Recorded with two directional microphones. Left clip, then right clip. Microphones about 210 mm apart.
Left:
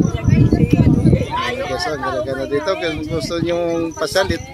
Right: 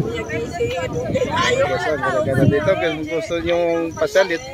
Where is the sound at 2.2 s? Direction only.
10° left (ahead or behind).